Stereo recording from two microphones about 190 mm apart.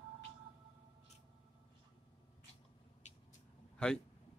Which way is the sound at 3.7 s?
5° left (ahead or behind).